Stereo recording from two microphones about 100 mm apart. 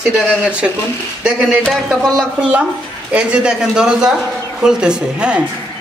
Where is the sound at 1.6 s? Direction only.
Centre (ahead or behind).